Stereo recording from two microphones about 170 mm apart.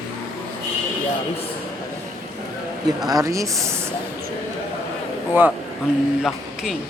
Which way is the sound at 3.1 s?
20° right (ahead or behind).